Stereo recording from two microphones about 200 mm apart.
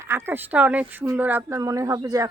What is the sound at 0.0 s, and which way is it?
Speech, 10° right (ahead or behind).